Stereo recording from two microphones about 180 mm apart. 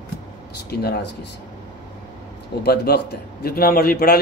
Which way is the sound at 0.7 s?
65° left (ahead or behind).